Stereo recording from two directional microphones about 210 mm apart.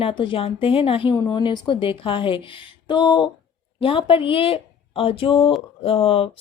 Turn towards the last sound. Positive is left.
turn(degrees=25)  # may be behind; listen again after turning